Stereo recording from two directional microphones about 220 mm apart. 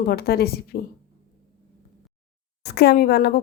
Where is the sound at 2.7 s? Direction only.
50° left (ahead or behind).